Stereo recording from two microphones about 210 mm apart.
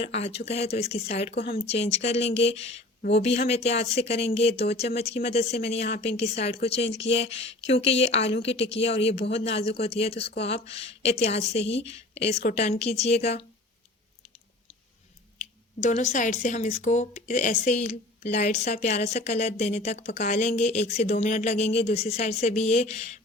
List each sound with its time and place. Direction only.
0.0 s a woman's voice: 30° left (ahead or behind)
1.3 s speech: 50° left (ahead or behind)
1.6 s a woman's voice: 30° left (ahead or behind)
3.0 s a woman's voice: 55° left (ahead or behind)
3.2 s a woman's voice: 30° left (ahead or behind)
7.3 s speech: 60° left (ahead or behind)
7.9 s a woman's voice: 30° left (ahead or behind)
15.8 s a woman's voice: 35° left (ahead or behind)